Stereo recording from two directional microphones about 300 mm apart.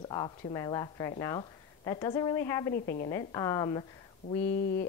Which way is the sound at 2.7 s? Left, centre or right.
Left.